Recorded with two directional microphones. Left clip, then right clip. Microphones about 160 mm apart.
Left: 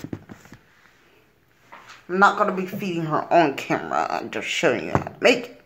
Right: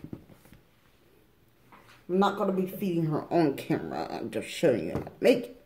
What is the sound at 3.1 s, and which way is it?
Speech, 35° right (ahead or behind).